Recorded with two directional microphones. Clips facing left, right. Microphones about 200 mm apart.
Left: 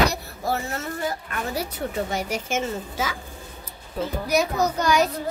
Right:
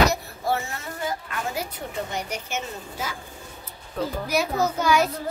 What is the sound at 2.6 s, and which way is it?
Speech, 90° left.